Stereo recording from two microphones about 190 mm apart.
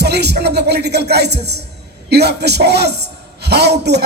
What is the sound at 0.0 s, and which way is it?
A woman's voice, 60° right (ahead or behind).